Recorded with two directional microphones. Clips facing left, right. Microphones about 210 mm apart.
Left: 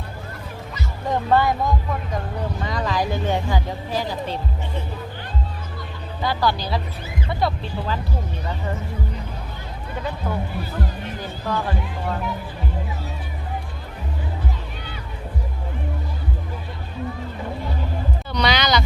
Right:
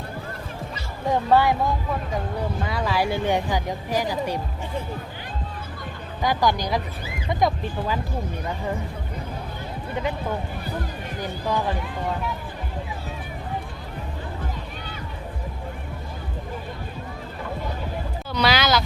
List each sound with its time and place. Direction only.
1.0 s speech: 10° right (ahead or behind)
6.2 s speech: 15° right (ahead or behind)
11.2 s music: 15° right (ahead or behind)
18.3 s speech: 5° right (ahead or behind)